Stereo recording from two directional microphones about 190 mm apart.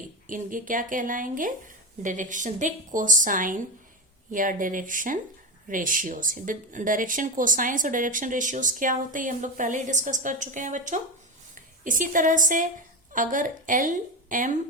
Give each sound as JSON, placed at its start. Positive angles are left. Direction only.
{"t": 0.3, "sound": "a woman's voice", "side_deg": -45}